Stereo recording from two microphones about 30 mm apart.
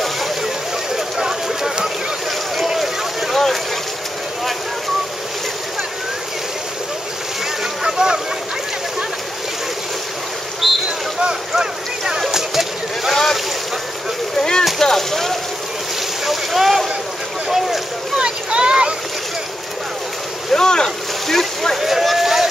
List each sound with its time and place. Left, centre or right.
0.9 s a sound: centre
2.5 s boat: centre
3.3 s boat: centre
7.8 s boat: right
10.6 s boat: centre
11.5 s boat: centre
12.3 s a sound: centre
13.1 s boat: centre
14.8 s a sound: centre
16.3 s vehicle: centre
18.1 s boat: right
20.5 s boat: left
21.3 s vehicle: centre
21.7 s a sound: centre